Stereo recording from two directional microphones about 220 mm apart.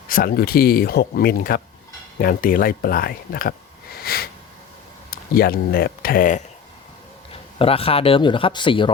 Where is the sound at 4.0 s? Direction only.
45° left (ahead or behind).